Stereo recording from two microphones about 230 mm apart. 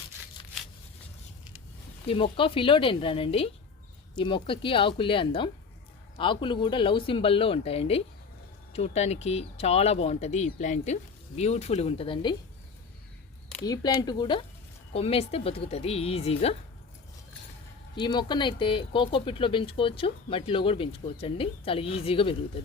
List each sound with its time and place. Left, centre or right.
2.0 s speech: left
13.7 s speech: centre
17.9 s speech: centre